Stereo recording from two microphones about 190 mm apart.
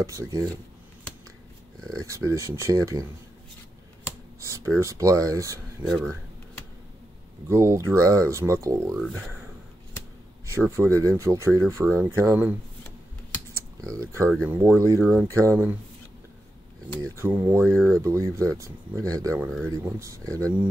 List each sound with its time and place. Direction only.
0.0 s speech: 15° right (ahead or behind)
1.9 s speech: 15° right (ahead or behind)
4.4 s speech: 15° right (ahead or behind)
5.9 s a sound: 5° left (ahead or behind)
7.4 s speech: 15° right (ahead or behind)
10.8 s speech: 15° right (ahead or behind)
13.5 s computer keyboard: 15° right (ahead or behind)
14.2 s speech: 5° left (ahead or behind)
14.5 s speech: 10° right (ahead or behind)
17.0 s speech: 15° right (ahead or behind)
17.6 s speech: 5° left (ahead or behind)
18.0 s speech: 15° right (ahead or behind)